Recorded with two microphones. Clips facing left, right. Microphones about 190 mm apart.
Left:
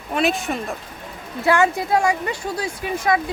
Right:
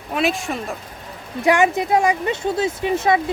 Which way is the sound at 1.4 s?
15° right (ahead or behind).